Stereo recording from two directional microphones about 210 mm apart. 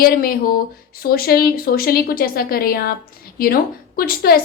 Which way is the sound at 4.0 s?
45° left (ahead or behind).